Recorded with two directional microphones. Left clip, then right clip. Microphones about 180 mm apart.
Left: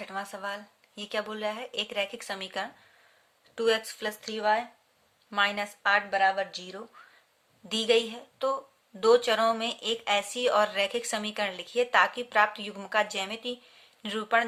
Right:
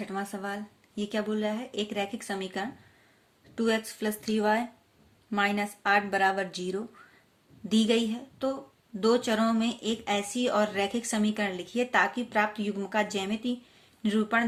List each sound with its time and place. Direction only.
0.0 s speech: 25° left (ahead or behind)
7.7 s speech: 30° left (ahead or behind)